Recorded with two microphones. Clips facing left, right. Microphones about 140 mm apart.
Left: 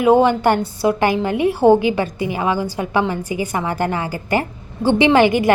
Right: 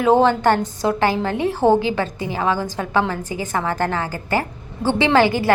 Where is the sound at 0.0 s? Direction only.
15° left (ahead or behind).